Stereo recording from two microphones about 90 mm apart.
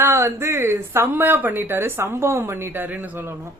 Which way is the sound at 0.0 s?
30° right (ahead or behind).